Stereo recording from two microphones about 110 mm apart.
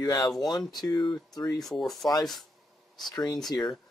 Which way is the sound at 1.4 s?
35° left (ahead or behind).